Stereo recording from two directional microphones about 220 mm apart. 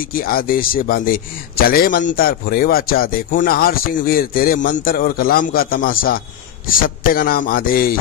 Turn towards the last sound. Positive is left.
turn(degrees=40)  # may be behind; listen again after turning